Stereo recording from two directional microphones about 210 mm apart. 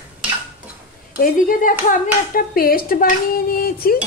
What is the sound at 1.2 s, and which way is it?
Speech, 40° left (ahead or behind).